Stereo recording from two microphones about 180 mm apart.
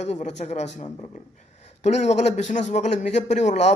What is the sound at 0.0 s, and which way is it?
Speech, 40° left (ahead or behind).